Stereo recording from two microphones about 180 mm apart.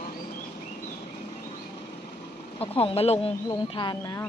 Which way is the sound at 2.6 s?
35° left (ahead or behind).